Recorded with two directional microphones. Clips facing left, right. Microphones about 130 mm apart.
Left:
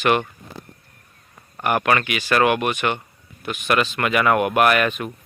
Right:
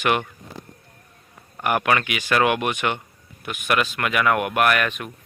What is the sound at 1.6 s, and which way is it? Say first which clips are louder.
Speech: left 1 dB; 10° right (ahead or behind).